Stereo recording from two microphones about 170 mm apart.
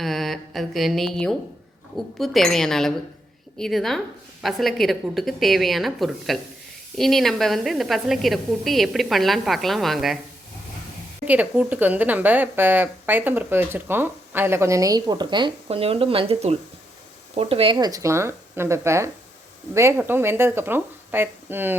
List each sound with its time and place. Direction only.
0.0 s a woman's voice: centre (ahead or behind)
11.3 s speech: 10° right (ahead or behind)